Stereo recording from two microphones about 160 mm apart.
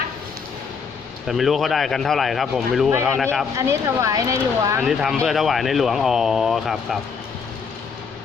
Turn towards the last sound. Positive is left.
turn(degrees=0)  # may be behind; listen again after turning